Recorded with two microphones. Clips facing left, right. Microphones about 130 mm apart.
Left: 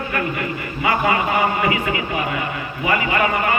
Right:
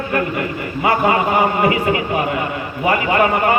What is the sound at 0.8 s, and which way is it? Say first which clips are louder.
A man's voice: right 3 dB; 45° right (ahead or behind).